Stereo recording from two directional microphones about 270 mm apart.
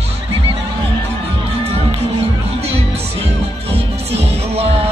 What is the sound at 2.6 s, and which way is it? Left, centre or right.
Music, right.